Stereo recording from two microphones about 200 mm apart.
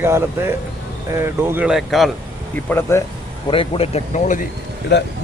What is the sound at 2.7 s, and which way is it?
Speech, 10° left (ahead or behind).